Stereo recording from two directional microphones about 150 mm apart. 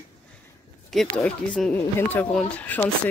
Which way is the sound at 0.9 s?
Centre (ahead or behind).